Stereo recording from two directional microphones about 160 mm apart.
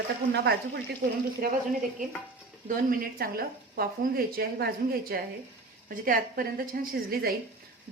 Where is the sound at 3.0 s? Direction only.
70° right (ahead or behind).